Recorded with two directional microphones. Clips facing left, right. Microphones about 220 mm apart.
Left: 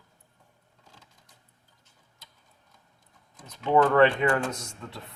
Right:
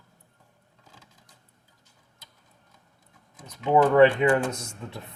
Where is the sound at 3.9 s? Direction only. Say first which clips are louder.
Right 3 dB; 15° right (ahead or behind).